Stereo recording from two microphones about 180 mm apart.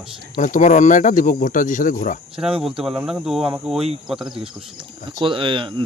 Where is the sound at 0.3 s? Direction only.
45° left (ahead or behind).